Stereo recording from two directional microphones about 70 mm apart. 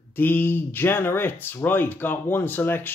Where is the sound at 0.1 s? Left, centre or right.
Left.